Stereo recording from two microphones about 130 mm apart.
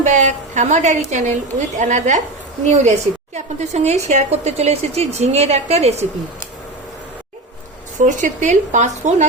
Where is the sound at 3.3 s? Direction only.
60° right (ahead or behind).